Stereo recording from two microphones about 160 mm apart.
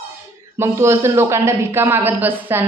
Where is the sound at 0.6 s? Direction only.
15° right (ahead or behind).